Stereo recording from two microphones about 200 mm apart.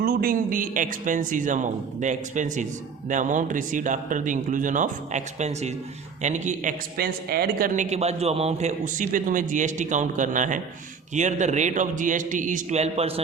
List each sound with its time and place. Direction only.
0.0 s a man's voice: 50° right (ahead or behind)
7.9 s a man's voice: 30° right (ahead or behind)